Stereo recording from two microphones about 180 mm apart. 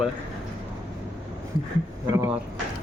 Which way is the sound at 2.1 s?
15° right (ahead or behind).